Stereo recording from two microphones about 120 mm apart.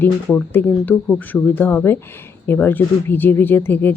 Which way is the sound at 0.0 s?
15° left (ahead or behind).